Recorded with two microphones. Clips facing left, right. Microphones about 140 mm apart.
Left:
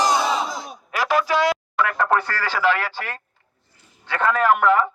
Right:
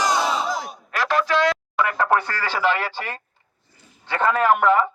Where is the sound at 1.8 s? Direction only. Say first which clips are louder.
Even; 15° right (ahead or behind).